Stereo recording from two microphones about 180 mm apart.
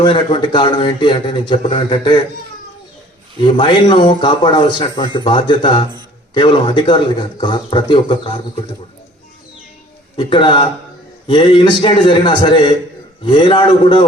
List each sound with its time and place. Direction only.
0.0 s a man's voice: 25° left (ahead or behind)
3.4 s a man's voice: 25° left (ahead or behind)
10.2 s a man's voice: 25° left (ahead or behind)